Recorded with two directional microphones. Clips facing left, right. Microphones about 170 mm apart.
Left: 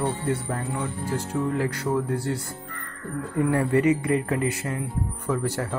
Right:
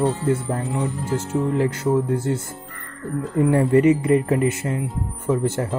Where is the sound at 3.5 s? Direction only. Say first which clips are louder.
Right 5 dB; 25° right (ahead or behind).